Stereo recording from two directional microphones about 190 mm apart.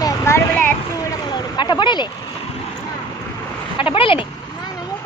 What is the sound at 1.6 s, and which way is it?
Speech, 25° left (ahead or behind).